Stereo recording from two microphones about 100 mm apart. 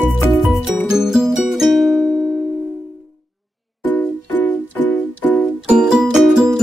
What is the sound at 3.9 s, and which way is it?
Music, 20° left (ahead or behind).